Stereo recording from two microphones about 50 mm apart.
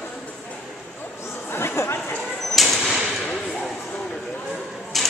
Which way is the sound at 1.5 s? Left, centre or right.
Left.